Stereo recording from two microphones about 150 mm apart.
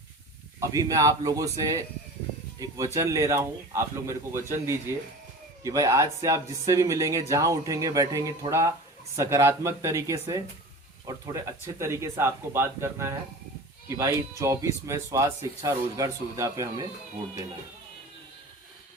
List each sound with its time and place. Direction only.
0.6 s speech: 20° right (ahead or behind)